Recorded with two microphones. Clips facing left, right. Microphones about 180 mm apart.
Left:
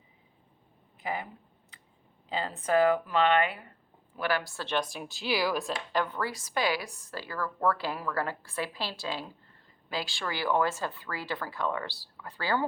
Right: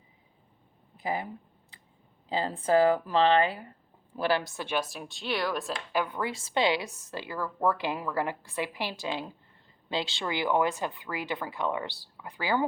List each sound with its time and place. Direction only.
1.0 s speech: 35° right (ahead or behind)
2.3 s speech: 30° right (ahead or behind); by 5.8 s centre (ahead or behind)
5.9 s speech: 10° right (ahead or behind)